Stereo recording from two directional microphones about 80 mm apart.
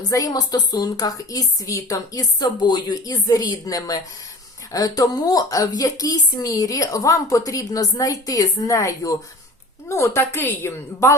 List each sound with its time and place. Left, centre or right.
0.1 s speech: left
3.2 s a woman's voice: left